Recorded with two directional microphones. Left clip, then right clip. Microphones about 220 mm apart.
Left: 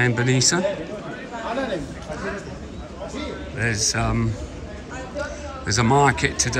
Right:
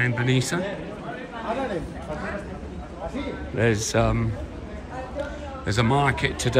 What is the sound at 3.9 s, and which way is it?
Speech, centre (ahead or behind).